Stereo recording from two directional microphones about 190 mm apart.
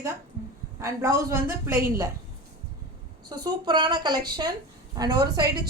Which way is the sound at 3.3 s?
25° right (ahead or behind).